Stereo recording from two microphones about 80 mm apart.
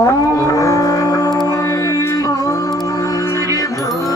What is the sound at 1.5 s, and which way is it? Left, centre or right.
Music, left.